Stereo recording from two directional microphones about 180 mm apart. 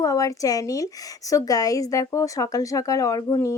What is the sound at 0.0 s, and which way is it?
A woman's voice, 20° left (ahead or behind).